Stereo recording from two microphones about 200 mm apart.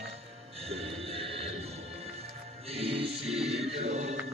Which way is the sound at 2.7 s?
30° right (ahead or behind).